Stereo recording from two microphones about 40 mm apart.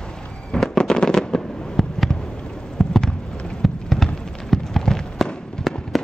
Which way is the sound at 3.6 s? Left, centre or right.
Centre.